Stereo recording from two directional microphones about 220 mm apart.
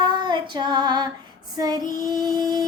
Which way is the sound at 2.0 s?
20° right (ahead or behind).